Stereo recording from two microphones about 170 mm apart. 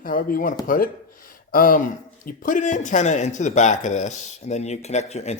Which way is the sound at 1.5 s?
55° left (ahead or behind).